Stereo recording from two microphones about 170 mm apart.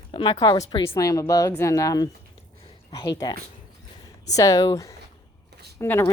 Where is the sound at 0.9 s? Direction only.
20° left (ahead or behind).